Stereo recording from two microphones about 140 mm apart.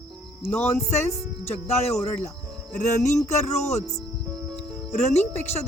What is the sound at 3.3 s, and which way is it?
Speech, 55° left (ahead or behind).